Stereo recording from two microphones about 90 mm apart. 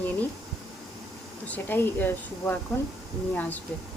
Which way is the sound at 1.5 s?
20° left (ahead or behind).